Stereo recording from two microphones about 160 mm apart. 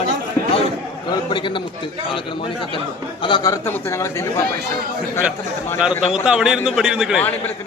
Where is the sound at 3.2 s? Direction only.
25° left (ahead or behind).